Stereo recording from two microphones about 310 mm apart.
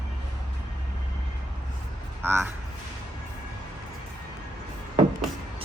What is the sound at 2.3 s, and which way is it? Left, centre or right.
Speech, centre.